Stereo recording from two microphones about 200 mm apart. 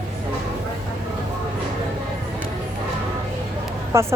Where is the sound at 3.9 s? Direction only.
15° right (ahead or behind).